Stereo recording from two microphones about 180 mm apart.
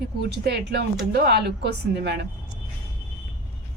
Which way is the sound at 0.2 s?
65° right (ahead or behind).